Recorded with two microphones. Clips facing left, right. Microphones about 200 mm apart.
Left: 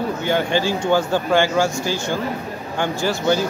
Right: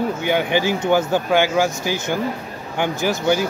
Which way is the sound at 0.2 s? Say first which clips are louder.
Left 1 dB; 15° right (ahead or behind).